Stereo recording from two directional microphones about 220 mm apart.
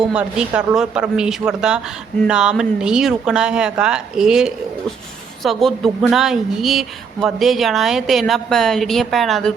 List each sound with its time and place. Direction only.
0.0 s a woman's voice: 5° right (ahead or behind)